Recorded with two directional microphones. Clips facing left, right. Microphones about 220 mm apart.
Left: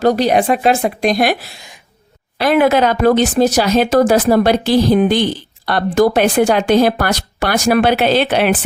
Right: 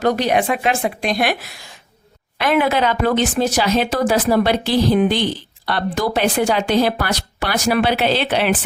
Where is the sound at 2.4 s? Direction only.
40° left (ahead or behind).